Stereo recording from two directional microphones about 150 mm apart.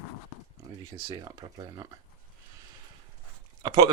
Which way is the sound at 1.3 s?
25° right (ahead or behind).